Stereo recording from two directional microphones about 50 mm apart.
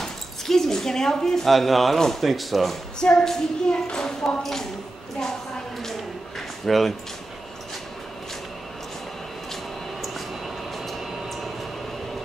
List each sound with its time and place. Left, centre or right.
0.0 s speech: centre
3.0 s speech: centre
6.6 s speech: centre